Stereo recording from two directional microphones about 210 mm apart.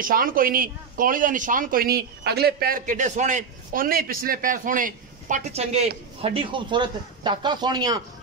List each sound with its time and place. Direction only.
0.0 s a man's voice: 40° right (ahead or behind); by 8.0 s 20° right (ahead or behind)